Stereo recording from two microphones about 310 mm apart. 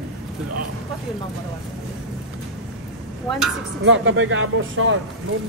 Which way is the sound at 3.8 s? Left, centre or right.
Right.